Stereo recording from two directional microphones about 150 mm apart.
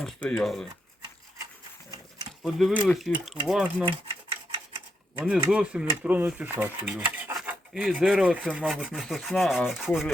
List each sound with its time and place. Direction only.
0.0 s rub: 5° left (ahead or behind)
2.4 s rub: centre (ahead or behind)
3.5 s speech: 10° right (ahead or behind)
3.8 s a sound: 40° right (ahead or behind)
5.1 s speech: 10° right (ahead or behind)
7.3 s rub: 5° right (ahead or behind)